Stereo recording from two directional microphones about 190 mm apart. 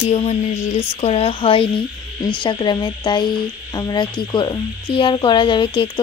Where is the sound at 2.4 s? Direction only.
25° left (ahead or behind).